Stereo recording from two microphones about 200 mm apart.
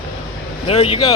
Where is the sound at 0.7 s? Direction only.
30° left (ahead or behind).